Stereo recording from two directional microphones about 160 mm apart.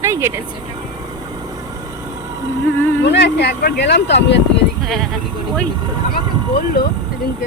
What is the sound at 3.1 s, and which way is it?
Speech, 90° left.